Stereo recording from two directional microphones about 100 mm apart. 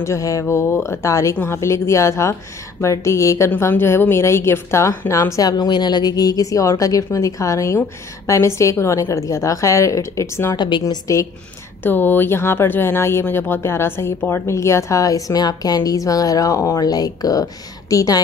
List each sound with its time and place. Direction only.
0.0 s speech: 30° left (ahead or behind)
10.5 s a woman's voice: 50° left (ahead or behind)
10.9 s speech: 35° left (ahead or behind)
11.8 s speech: 20° left (ahead or behind); by 18.2 s 35° left (ahead or behind)